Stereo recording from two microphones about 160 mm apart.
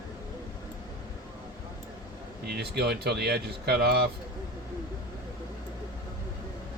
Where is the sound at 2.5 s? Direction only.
90° right.